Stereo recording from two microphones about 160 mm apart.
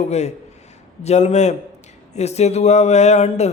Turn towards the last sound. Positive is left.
turn(degrees=45)  # may be behind; listen again after turning